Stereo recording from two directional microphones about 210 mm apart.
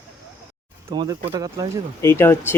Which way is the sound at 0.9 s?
20° right (ahead or behind).